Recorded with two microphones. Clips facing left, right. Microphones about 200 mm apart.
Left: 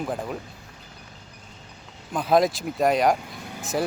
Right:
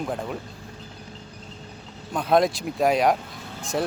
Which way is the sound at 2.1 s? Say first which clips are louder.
Even; centre (ahead or behind).